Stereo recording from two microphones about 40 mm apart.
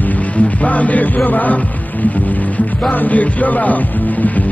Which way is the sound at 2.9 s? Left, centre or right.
Left.